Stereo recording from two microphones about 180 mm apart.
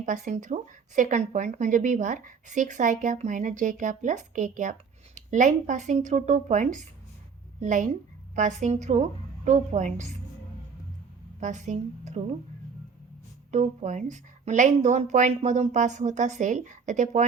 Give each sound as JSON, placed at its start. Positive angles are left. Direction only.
{"t": 0.0, "sound": "a woman's voice", "side_deg": -45}
{"t": 11.3, "sound": "a woman's voice", "side_deg": -40}
{"t": 13.5, "sound": "a woman's voice", "side_deg": -40}